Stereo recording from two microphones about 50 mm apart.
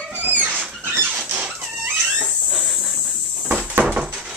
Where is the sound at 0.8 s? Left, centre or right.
Right.